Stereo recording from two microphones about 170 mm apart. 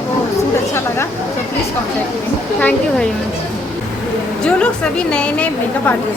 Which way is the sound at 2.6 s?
10° left (ahead or behind).